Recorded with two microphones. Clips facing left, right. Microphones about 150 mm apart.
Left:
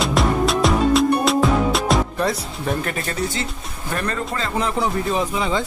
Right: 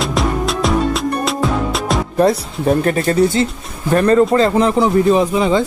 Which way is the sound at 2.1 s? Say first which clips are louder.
Right 9 dB; 40° right (ahead or behind).